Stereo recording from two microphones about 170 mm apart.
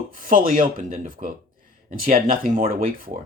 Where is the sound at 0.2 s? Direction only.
55° right (ahead or behind).